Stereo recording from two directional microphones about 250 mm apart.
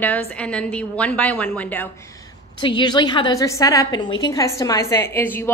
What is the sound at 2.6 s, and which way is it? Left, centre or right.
Speech, centre.